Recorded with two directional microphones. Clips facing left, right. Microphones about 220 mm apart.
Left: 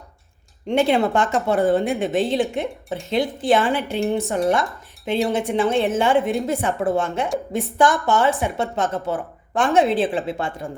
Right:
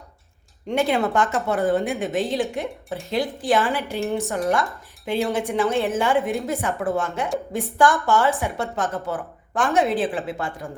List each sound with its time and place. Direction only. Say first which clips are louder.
0.7 s a woman's voice: left 3 dB; 30° left (ahead or behind)